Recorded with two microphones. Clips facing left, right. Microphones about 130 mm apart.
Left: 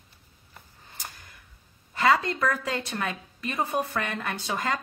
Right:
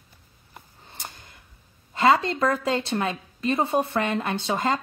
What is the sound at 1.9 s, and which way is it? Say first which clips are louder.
A woman's voice: right 3 dB; 25° right (ahead or behind).